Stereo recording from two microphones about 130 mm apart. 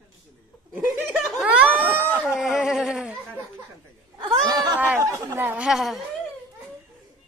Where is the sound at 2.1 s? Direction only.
Centre (ahead or behind).